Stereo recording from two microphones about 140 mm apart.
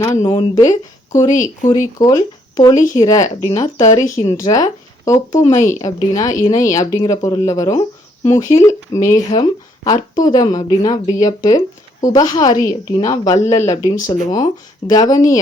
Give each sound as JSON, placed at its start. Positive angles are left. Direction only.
{"t": 0.0, "sound": "a woman's voice", "side_deg": 25}